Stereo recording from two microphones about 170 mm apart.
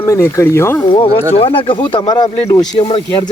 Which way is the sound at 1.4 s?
30° left (ahead or behind).